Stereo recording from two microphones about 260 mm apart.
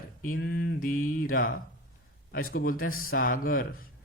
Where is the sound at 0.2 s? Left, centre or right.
Left.